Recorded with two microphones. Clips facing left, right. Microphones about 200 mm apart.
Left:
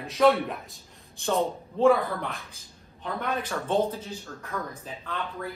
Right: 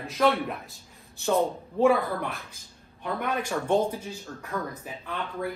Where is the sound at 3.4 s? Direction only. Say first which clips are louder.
Right 2 dB; 10° right (ahead or behind).